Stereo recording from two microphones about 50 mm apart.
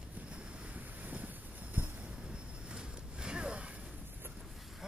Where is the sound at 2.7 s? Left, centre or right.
Centre.